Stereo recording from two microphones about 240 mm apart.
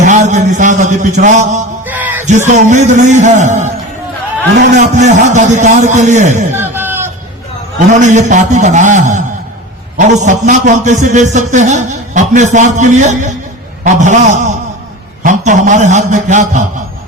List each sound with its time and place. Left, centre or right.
0.0 s a man's voice: right
1.8 s music: centre
2.2 s a man's voice: right
4.7 s a man's voice: right
6.6 s a sound: centre
7.9 s a man's voice: right